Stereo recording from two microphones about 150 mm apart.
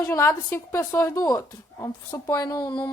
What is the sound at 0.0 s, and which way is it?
A woman's voice, 15° left (ahead or behind).